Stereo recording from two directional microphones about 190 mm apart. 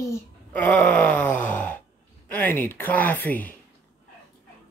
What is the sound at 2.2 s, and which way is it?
Speech, 10° left (ahead or behind).